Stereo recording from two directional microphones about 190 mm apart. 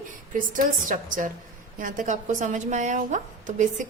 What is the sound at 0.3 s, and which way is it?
A woman's voice, 45° right (ahead or behind).